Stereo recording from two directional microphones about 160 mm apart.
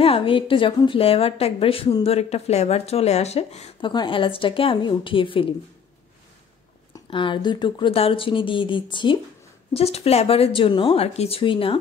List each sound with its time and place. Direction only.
0.0 s speech: 35° left (ahead or behind)
6.9 s speech: 30° left (ahead or behind)